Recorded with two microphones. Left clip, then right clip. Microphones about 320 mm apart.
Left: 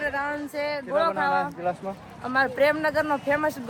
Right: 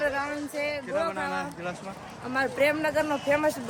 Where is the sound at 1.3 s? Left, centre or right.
Centre.